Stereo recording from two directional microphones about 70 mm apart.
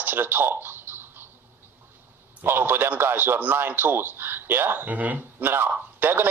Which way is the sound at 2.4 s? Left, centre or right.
Right.